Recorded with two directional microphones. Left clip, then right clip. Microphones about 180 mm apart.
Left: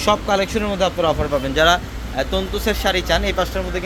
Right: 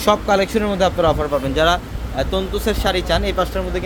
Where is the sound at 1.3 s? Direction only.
5° right (ahead or behind).